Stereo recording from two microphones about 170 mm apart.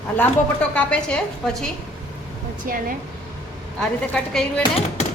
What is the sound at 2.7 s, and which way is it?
Speech, 55° right (ahead or behind).